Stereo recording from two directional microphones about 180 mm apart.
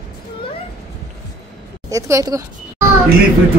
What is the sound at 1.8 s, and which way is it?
Speech, 15° right (ahead or behind).